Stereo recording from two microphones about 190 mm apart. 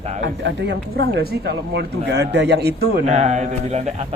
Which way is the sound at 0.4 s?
65° right (ahead or behind).